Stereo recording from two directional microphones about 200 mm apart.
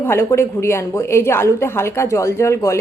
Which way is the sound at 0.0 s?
10° left (ahead or behind).